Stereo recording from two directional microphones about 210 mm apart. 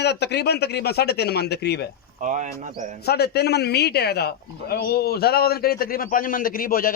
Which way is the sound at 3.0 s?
50° left (ahead or behind).